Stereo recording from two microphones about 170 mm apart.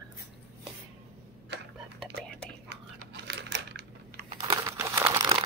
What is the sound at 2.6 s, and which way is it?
Typing, 85° right.